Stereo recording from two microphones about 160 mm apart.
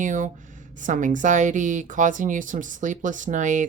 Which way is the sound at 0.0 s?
55° right (ahead or behind).